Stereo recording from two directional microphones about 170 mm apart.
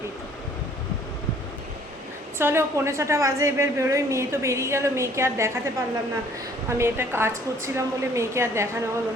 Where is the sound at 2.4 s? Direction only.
15° right (ahead or behind).